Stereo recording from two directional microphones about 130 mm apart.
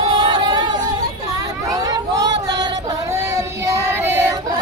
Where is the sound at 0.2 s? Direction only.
35° right (ahead or behind).